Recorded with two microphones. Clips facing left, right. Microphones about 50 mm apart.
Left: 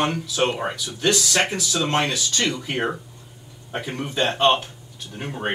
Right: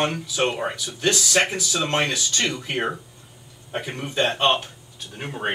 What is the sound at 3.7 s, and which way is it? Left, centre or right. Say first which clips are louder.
Speech: even; centre.